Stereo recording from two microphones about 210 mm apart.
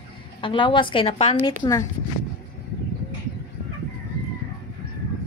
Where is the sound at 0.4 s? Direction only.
25° left (ahead or behind).